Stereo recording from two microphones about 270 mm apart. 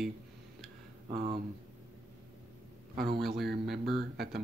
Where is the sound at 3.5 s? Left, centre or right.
Right.